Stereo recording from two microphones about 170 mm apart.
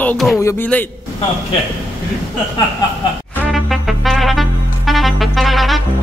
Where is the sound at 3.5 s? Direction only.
Centre (ahead or behind).